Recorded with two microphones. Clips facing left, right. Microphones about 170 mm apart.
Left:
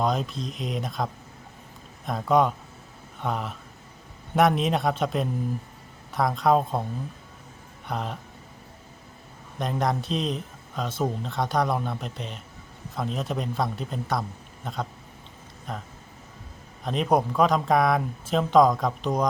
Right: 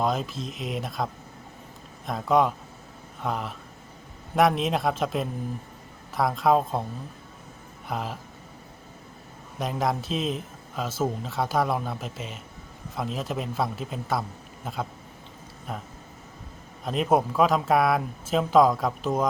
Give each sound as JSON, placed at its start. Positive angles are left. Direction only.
{"t": 0.0, "sound": "speech", "side_deg": 0}
{"t": 7.9, "sound": "speech", "side_deg": 0}
{"t": 9.6, "sound": "speech", "side_deg": 0}